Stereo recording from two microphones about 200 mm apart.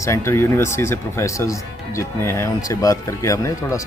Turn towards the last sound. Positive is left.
turn(degrees=15)  # may be behind; listen again after turning